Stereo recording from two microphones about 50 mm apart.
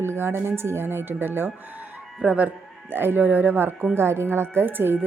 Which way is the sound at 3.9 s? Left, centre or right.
Right.